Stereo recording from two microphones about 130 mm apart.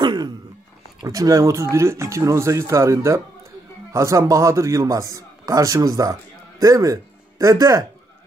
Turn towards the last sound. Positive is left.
turn(degrees=-25)  # may be behind; listen again after turning